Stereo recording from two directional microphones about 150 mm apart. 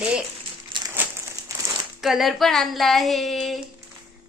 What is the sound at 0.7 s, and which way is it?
Crumpling, 35° right (ahead or behind).